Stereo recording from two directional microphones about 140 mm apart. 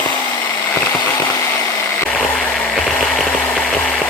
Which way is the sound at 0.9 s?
30° left (ahead or behind).